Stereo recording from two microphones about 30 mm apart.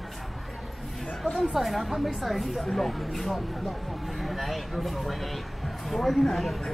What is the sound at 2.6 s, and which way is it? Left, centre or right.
Speech, centre.